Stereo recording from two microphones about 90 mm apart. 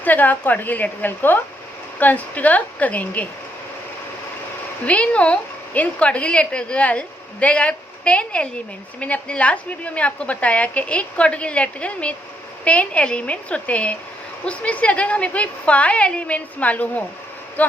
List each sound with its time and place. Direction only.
0.0 s a woman's voice: 20° left (ahead or behind)
4.9 s a woman's voice: 15° left (ahead or behind)